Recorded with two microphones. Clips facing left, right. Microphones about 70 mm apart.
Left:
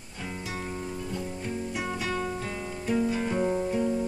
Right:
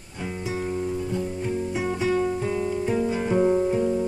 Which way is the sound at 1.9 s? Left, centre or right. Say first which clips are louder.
Right 10 dB; centre.